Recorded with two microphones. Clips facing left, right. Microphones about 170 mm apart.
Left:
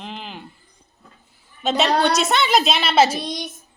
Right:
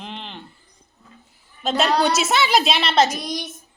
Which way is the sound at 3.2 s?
25° left (ahead or behind).